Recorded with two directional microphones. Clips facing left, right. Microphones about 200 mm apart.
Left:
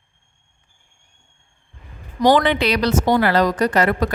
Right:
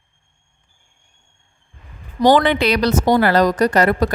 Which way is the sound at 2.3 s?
45° right (ahead or behind).